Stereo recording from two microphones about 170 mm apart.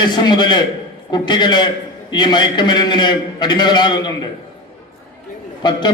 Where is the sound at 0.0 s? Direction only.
25° left (ahead or behind).